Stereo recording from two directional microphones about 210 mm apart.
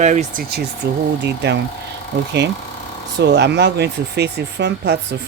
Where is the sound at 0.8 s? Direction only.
50° right (ahead or behind).